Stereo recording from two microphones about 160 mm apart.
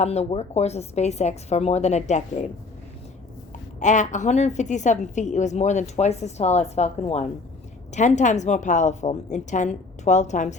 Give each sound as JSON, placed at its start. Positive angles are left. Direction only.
{"t": 0.0, "sound": "a woman's voice", "side_deg": 45}
{"t": 3.8, "sound": "a woman's voice", "side_deg": 50}